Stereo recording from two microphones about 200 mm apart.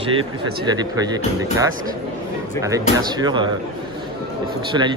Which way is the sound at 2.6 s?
15° right (ahead or behind).